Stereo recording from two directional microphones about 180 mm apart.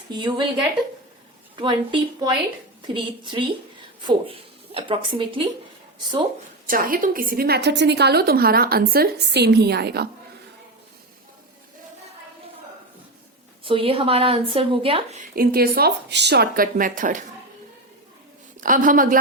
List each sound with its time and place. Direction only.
0.1 s a woman's voice: 25° right (ahead or behind)
1.5 s a woman's voice: 25° right (ahead or behind)
6.7 s a woman's voice: 50° right (ahead or behind)
13.7 s a woman's voice: 30° right (ahead or behind)
15.4 s a woman's voice: 55° right (ahead or behind)
18.6 s a woman's voice: 50° right (ahead or behind)